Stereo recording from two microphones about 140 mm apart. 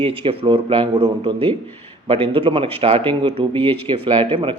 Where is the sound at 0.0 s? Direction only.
40° right (ahead or behind).